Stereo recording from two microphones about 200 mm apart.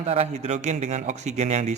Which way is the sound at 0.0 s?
30° right (ahead or behind).